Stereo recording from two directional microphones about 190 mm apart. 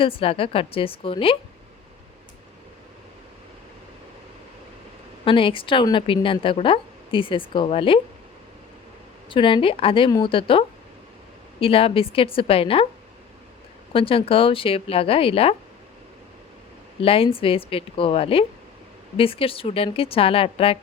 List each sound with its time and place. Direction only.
0.0 s speech: 30° left (ahead or behind)
5.2 s speech: 25° left (ahead or behind)
9.3 s speech: 25° left (ahead or behind)
11.6 s speech: 30° left (ahead or behind)
13.9 s speech: 30° left (ahead or behind)
17.0 s speech: 30° left (ahead or behind)